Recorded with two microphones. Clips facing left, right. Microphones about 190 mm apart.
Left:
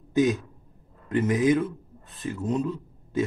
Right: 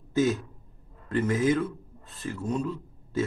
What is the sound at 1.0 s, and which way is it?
A man's voice, 20° left (ahead or behind).